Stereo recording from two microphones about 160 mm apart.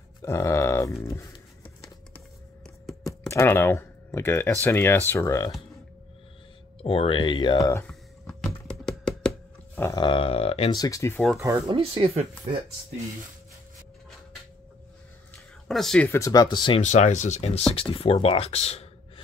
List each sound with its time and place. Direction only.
0.2 s a sound: 20° left (ahead or behind)
3.1 s speech: 20° left (ahead or behind)
6.8 s speech: 35° left (ahead or behind)
7.8 s a sound: 5° left (ahead or behind)
9.8 s a sound: 20° left (ahead or behind)
10.0 s speech: 35° left (ahead or behind)
10.8 s speech: 20° left (ahead or behind)
11.4 s speech: 25° right (ahead or behind)
15.7 s speech: 5° left (ahead or behind)
16.1 s speech: 20° left (ahead or behind)
16.8 s speech: 45° left (ahead or behind)